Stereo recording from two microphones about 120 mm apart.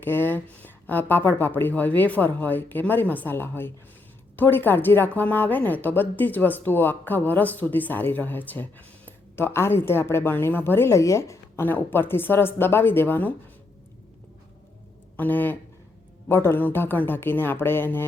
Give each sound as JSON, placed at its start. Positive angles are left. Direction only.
{"t": 0.0, "sound": "speech", "side_deg": 15}
{"t": 15.1, "sound": "speech", "side_deg": 15}